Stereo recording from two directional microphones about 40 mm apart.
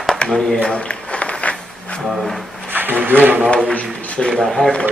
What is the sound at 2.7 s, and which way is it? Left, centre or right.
Speech, right.